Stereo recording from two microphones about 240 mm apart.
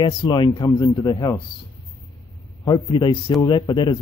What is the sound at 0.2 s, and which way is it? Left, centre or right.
Speech, centre.